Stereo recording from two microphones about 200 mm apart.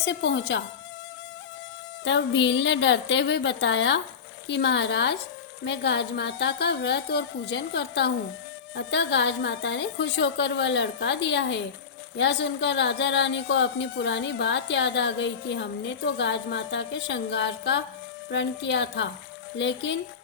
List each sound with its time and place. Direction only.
0.0 s a woman's voice: 60° left (ahead or behind)
2.0 s a woman's voice: 65° left (ahead or behind)